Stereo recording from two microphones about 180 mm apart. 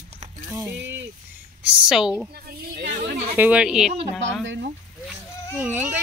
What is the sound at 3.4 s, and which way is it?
Speech, 5° right (ahead or behind).